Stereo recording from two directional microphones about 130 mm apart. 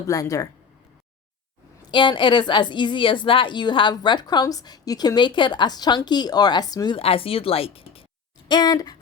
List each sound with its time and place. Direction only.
0.0 s speech: 25° left (ahead or behind)
1.9 s a woman's voice: 35° left (ahead or behind)
6.9 s speech: 45° left (ahead or behind)
8.4 s a woman's voice: 35° left (ahead or behind)